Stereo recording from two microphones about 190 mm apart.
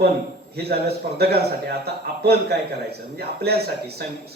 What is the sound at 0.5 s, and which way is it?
A man's voice, 55° right (ahead or behind).